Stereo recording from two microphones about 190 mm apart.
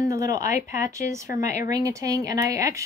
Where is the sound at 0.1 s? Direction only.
15° right (ahead or behind).